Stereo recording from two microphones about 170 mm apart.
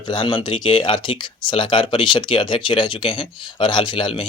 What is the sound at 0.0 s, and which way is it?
Speech, 25° left (ahead or behind).